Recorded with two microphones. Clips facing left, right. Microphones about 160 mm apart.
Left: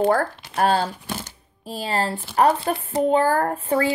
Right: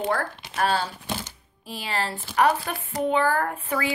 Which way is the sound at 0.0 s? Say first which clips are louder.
Left 7 dB; 40° left (ahead or behind).